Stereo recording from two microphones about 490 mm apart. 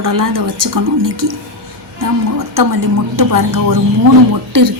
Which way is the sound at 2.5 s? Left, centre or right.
Right.